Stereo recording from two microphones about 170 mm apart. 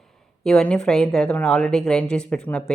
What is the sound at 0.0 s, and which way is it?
Speech, 5° left (ahead or behind).